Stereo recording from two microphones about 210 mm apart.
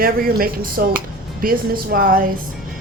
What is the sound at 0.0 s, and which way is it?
Speech, 45° right (ahead or behind).